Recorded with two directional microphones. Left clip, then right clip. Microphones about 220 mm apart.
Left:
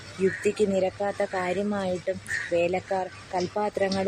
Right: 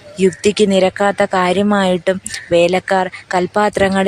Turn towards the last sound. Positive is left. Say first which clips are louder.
# right 12 dB
turn(degrees=-40)  # may be behind; listen again after turning